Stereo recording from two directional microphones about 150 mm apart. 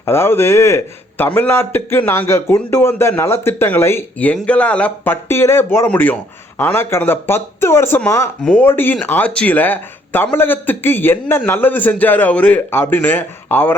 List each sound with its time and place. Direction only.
0.0 s speech: 15° left (ahead or behind)